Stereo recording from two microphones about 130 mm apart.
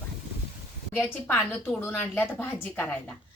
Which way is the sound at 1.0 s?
15° left (ahead or behind).